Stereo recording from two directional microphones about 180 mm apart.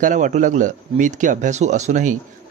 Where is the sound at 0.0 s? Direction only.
45° right (ahead or behind).